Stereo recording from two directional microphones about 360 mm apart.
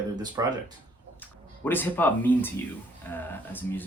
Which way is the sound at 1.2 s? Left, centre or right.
Centre.